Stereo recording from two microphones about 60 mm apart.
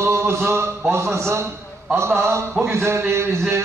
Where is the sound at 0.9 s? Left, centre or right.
Right.